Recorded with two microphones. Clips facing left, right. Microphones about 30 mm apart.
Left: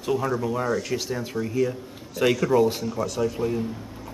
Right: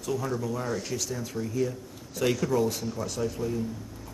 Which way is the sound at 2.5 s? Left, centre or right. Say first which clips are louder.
Left 6 dB; left.